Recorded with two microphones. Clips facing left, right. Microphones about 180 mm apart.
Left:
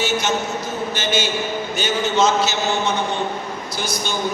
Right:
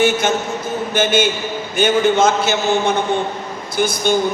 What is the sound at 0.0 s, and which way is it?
A man's voice, 55° right (ahead or behind).